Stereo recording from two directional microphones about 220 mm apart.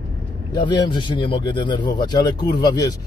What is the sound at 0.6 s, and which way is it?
A man's voice, 20° left (ahead or behind).